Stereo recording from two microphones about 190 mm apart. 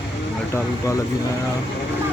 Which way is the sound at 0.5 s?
15° left (ahead or behind).